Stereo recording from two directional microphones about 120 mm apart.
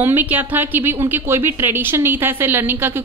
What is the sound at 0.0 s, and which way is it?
A woman's voice, 15° right (ahead or behind).